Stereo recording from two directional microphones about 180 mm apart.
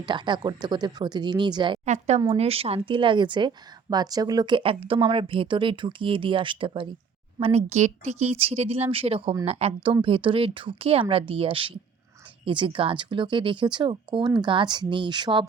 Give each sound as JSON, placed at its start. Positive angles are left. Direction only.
{"t": 0.0, "sound": "a woman's voice", "side_deg": -25}
{"t": 1.8, "sound": "a woman's voice", "side_deg": -40}